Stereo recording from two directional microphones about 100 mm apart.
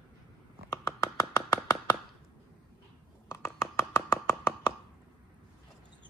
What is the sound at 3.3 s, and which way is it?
Hands, 25° left (ahead or behind).